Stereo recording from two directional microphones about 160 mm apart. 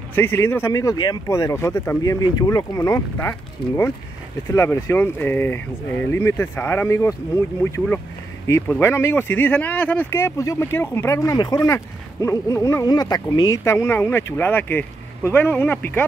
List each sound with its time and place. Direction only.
0.1 s speech: 15° left (ahead or behind)